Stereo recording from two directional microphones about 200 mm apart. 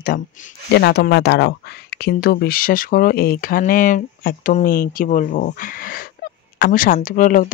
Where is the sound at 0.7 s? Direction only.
55° left (ahead or behind).